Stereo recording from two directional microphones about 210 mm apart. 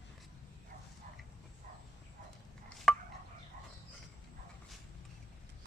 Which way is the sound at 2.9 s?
5° left (ahead or behind).